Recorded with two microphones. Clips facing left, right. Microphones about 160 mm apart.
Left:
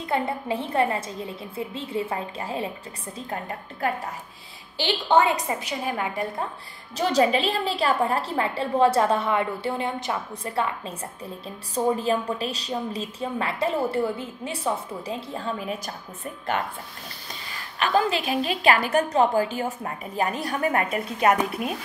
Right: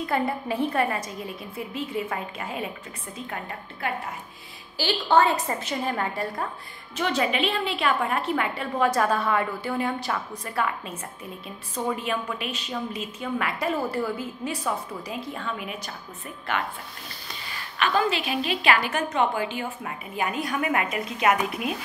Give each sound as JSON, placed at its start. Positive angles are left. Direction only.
{"t": 0.0, "sound": "a woman's voice", "side_deg": 25}
{"t": 4.7, "sound": "a woman's voice", "side_deg": 20}
{"t": 7.0, "sound": "a woman's voice", "side_deg": 35}
{"t": 17.7, "sound": "a woman's voice", "side_deg": 40}